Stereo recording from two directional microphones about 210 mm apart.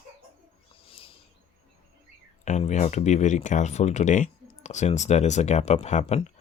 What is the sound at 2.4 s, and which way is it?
Speech, 35° left (ahead or behind).